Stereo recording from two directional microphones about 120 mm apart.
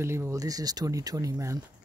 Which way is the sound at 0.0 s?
20° right (ahead or behind).